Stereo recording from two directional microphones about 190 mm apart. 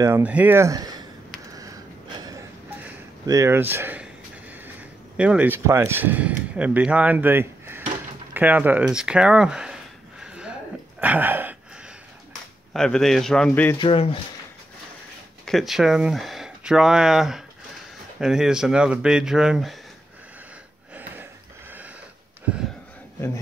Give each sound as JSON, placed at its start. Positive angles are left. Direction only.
{"t": 0.0, "sound": "speech", "side_deg": -10}
{"t": 1.5, "sound": "a sound", "side_deg": -20}
{"t": 5.1, "sound": "speech", "side_deg": -5}
{"t": 10.2, "sound": "a sound", "side_deg": -5}
{"t": 11.0, "sound": "gasp", "side_deg": -10}
{"t": 12.7, "sound": "speech", "side_deg": 5}
{"t": 13.7, "sound": "speech", "side_deg": 30}
{"t": 15.4, "sound": "speech", "side_deg": 0}
{"t": 20.9, "sound": "a sound", "side_deg": -10}